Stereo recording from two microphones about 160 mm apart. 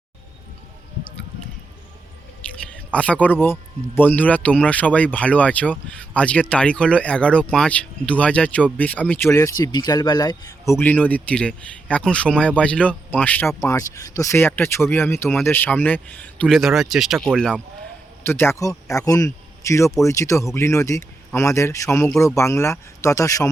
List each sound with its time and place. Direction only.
2.6 s speech: 5° left (ahead or behind)
18.3 s speech: 15° left (ahead or behind)